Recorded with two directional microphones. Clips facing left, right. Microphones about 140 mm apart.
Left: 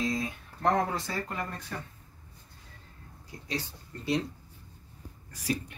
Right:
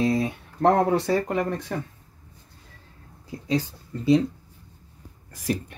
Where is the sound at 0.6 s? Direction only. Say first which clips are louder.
Right 8 dB; 70° right (ahead or behind).